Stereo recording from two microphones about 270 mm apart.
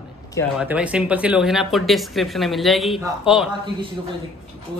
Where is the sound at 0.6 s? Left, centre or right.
Centre.